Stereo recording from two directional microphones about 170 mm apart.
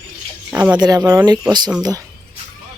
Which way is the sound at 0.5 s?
10° right (ahead or behind).